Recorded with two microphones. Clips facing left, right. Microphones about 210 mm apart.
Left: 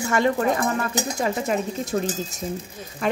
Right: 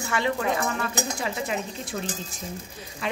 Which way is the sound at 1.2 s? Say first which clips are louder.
Left 6 dB; 45° left (ahead or behind).